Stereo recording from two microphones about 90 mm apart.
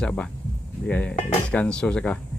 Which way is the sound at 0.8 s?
15° left (ahead or behind).